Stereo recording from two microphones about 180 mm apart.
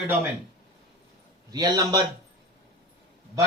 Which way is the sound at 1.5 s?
20° right (ahead or behind).